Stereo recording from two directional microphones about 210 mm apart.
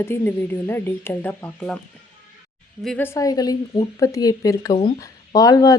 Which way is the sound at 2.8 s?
5° left (ahead or behind).